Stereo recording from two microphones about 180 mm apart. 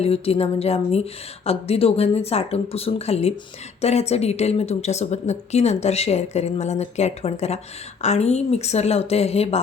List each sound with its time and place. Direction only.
0.0 s speech: 35° left (ahead or behind)